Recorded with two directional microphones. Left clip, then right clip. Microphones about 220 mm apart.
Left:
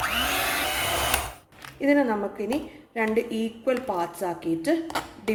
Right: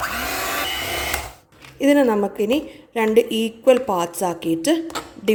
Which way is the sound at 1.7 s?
45° right (ahead or behind).